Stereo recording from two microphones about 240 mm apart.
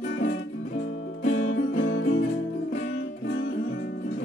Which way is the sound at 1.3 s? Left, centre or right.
Left.